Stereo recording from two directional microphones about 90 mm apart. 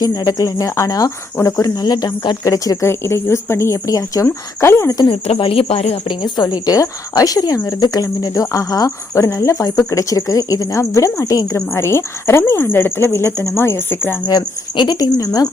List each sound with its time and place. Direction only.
0.0 s a woman's voice: 45° left (ahead or behind)
2.5 s speech: 35° left (ahead or behind)
5.0 s speech: 85° left
6.1 s a woman's voice: 50° left (ahead or behind)
11.7 s a woman's voice: 30° left (ahead or behind)
14.3 s a woman's voice: 50° left (ahead or behind)